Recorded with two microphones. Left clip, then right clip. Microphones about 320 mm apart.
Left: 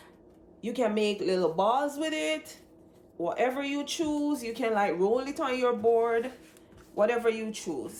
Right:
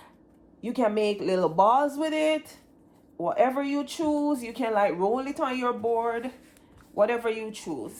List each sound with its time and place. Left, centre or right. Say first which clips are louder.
0.6 s speech: right 3 dB; centre